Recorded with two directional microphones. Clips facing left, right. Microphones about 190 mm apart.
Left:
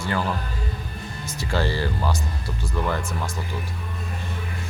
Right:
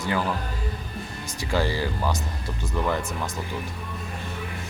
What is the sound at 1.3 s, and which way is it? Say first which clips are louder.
Speech: even; 15° right (ahead or behind).